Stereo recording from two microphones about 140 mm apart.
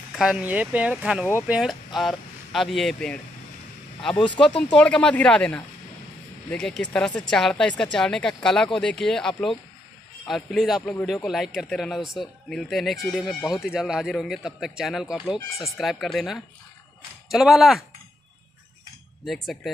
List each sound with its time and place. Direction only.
0.1 s speech: 5° right (ahead or behind)
4.1 s speech: 35° left (ahead or behind)
4.7 s speech: 5° left (ahead or behind)
19.2 s speech: centre (ahead or behind)